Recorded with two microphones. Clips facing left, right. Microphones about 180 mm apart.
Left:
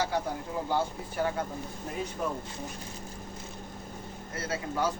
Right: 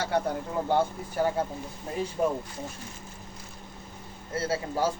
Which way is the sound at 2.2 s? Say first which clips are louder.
Right 7 dB; 30° right (ahead or behind).